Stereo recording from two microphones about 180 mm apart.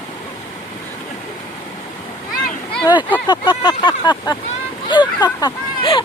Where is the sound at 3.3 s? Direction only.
25° left (ahead or behind).